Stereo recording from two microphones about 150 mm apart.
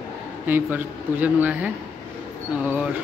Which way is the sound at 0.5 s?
10° right (ahead or behind).